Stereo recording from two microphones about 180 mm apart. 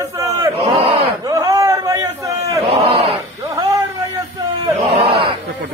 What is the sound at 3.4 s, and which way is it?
Cat, 20° right (ahead or behind).